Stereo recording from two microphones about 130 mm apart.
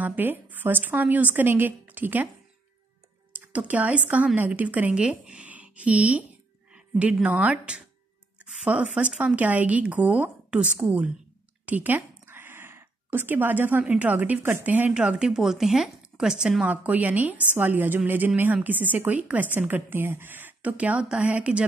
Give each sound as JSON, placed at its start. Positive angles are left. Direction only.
{"t": 0.0, "sound": "speech", "side_deg": -15}
{"t": 3.3, "sound": "a woman's voice", "side_deg": -10}